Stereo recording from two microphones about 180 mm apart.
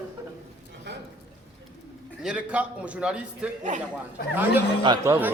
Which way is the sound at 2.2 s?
5° right (ahead or behind).